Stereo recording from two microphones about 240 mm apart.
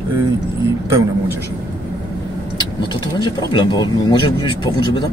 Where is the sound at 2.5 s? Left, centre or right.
Centre.